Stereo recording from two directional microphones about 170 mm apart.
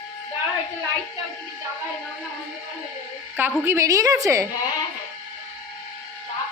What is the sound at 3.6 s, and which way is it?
Speech, 20° right (ahead or behind).